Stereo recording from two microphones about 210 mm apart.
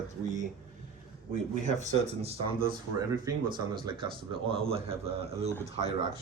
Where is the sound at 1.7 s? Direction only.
30° right (ahead or behind).